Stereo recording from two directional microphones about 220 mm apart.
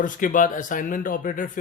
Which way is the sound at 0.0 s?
35° left (ahead or behind).